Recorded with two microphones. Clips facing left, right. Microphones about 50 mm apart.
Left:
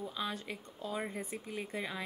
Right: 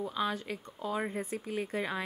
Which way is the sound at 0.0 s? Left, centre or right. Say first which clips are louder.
Right 6 dB; centre.